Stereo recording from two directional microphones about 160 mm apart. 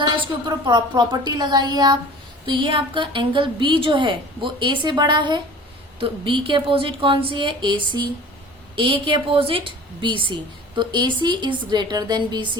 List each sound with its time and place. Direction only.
0.4 s a woman's voice: 30° right (ahead or behind)